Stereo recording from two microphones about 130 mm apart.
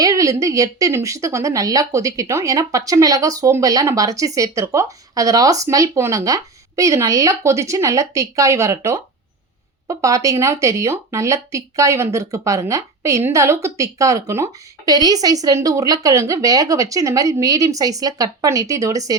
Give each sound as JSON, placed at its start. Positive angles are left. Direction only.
{"t": 0.0, "sound": "speech", "side_deg": -25}